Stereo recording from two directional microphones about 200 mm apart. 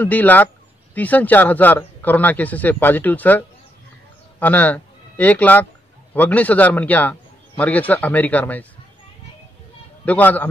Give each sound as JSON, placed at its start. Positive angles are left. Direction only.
{"t": 0.0, "sound": "speech", "side_deg": 10}
{"t": 10.0, "sound": "speech", "side_deg": 10}